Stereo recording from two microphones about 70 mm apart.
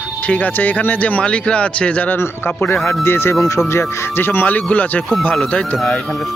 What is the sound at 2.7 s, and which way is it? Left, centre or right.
Speech, centre.